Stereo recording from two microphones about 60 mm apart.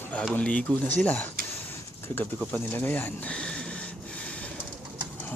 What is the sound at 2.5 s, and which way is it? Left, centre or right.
Speech, left.